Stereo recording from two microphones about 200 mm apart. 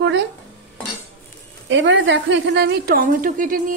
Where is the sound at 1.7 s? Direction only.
70° right (ahead or behind).